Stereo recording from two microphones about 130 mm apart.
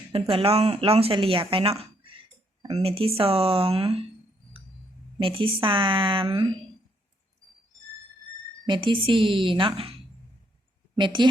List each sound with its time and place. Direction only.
0.1 s speech: 45° right (ahead or behind)
5.2 s speech: 40° right (ahead or behind)
8.6 s speech: 40° right (ahead or behind)
10.9 s speech: 35° right (ahead or behind)